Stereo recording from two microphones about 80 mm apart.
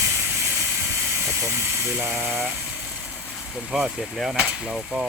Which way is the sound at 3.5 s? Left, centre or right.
Centre.